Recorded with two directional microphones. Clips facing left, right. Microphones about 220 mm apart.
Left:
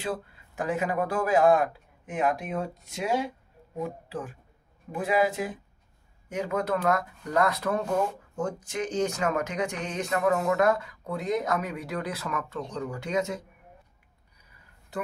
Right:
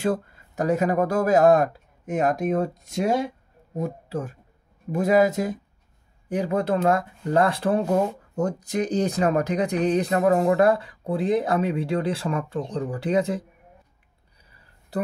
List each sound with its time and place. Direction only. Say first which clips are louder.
0.0 s speech: right 8 dB; 45° right (ahead or behind)